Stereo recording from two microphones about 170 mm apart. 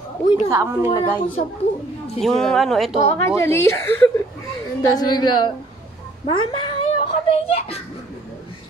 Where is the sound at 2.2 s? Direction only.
5° left (ahead or behind).